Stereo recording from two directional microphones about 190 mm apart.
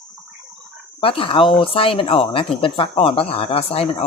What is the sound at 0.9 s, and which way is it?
Speech, 30° left (ahead or behind).